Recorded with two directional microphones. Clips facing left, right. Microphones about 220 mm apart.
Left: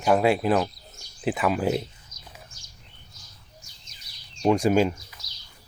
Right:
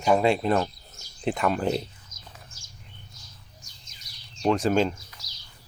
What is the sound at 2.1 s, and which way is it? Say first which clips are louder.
Horse: even; 45° right (ahead or behind).